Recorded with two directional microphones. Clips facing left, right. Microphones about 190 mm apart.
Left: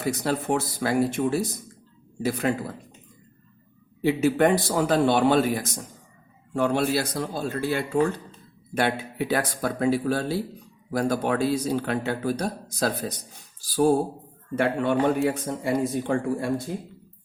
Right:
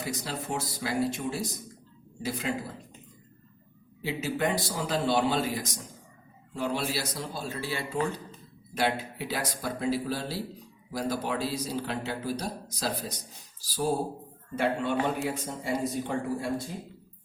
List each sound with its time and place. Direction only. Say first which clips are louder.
0.2 s a man's voice: left 9 dB; 55° left (ahead or behind)
4.0 s a man's voice: left 9 dB; 60° left (ahead or behind)
14.5 s a man's voice: left 5 dB; 55° left (ahead or behind)